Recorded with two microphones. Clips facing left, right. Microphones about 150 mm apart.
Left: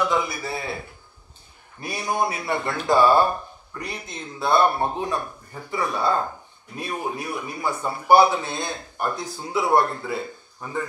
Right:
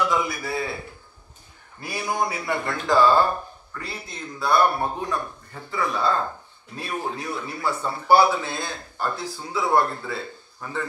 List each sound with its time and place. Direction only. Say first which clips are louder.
0.0 s a man's voice: even; 25° left (ahead or behind)
1.8 s a man's voice: left 1 dB; 20° left (ahead or behind)